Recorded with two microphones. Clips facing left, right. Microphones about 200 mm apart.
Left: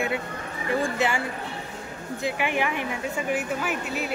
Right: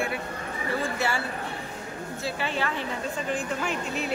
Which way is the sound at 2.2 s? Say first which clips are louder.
Left 4 dB; 15° left (ahead or behind).